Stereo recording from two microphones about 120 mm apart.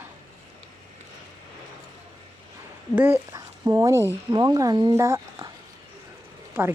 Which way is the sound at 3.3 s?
30° right (ahead or behind).